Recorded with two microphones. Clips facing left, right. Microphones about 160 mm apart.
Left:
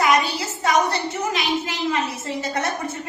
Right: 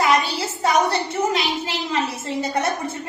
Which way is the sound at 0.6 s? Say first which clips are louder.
Right 1 dB; 30° right (ahead or behind).